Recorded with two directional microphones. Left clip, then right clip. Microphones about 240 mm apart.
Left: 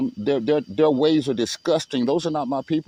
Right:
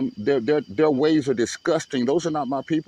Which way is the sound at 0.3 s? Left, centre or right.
Left.